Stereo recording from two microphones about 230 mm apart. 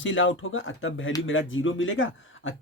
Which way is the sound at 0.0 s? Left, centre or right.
Left.